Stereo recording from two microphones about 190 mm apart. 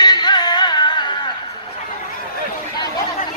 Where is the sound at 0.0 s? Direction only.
20° left (ahead or behind).